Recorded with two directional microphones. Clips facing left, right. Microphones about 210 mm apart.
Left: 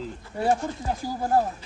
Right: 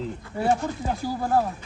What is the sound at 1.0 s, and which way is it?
Speech, 15° left (ahead or behind).